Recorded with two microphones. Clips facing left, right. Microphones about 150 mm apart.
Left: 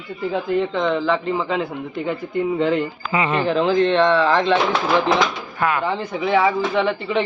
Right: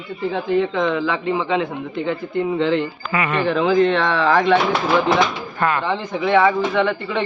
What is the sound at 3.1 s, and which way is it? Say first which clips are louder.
Speech: left 1 dB; 25° left (ahead or behind).